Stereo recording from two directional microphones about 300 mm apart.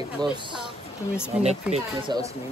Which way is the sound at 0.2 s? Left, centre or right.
Centre.